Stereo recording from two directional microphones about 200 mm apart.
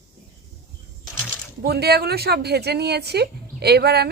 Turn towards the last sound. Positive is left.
turn(degrees=-55)  # may be behind; listen again after turning